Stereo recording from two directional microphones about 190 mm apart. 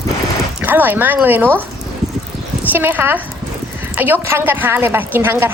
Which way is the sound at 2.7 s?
10° right (ahead or behind).